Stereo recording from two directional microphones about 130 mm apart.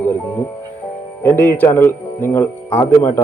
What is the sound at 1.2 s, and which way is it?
Speech, 15° left (ahead or behind).